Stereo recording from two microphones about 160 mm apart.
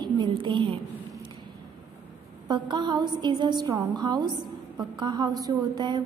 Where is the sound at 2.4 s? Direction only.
30° right (ahead or behind).